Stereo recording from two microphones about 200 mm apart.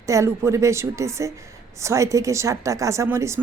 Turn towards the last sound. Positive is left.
turn(degrees=-15)  # may be behind; listen again after turning